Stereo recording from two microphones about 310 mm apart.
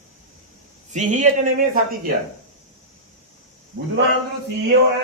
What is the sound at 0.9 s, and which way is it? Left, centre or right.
Speech, right.